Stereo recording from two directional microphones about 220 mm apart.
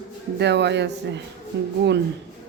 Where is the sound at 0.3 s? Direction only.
50° right (ahead or behind).